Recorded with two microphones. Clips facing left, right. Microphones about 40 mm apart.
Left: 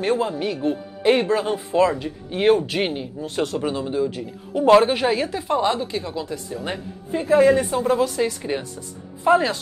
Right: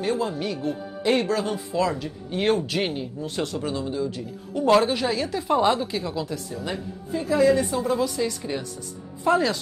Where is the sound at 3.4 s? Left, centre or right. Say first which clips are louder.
Left 5 dB; left.